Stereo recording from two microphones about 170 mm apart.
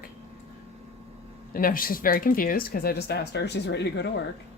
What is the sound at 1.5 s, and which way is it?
Speech, 55° left (ahead or behind).